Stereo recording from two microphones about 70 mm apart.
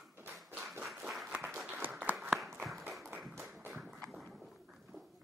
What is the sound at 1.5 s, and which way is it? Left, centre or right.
Applause, right.